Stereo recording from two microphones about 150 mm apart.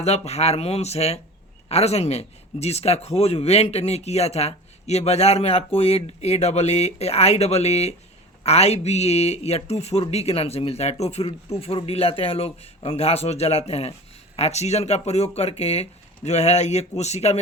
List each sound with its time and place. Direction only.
0.0 s speech: 45° left (ahead or behind)